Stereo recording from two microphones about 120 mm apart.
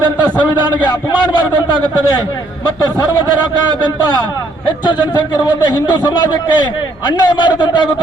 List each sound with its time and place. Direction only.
6.0 s a man's voice: 35° left (ahead or behind)